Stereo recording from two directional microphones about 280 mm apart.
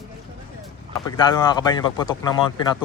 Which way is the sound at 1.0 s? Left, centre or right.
Centre.